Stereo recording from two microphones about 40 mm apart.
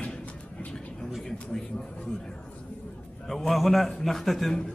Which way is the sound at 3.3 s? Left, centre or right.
Centre.